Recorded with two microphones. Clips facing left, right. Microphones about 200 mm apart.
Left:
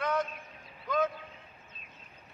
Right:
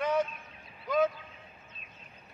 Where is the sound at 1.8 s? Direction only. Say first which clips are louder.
Right 1 dB; 35° left (ahead or behind).